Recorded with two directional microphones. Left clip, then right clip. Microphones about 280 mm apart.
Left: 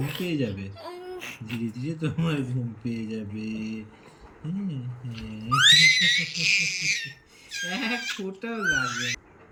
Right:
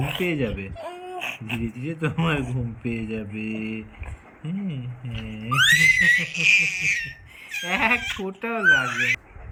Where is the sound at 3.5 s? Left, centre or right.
Right.